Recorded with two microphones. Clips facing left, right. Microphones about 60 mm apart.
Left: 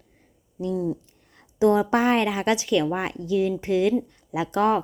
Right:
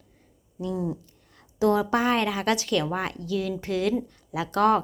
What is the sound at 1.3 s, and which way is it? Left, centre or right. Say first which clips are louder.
Speech: left 3 dB; left.